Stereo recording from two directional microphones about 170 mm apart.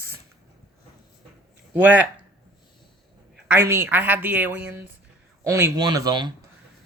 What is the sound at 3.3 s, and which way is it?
Speech, 10° right (ahead or behind).